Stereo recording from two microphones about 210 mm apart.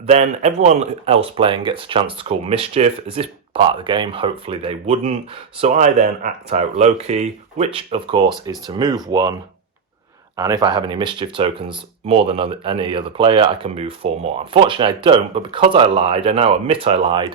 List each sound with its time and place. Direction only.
0.1 s speech: 30° right (ahead or behind)
10.3 s speech: 15° right (ahead or behind)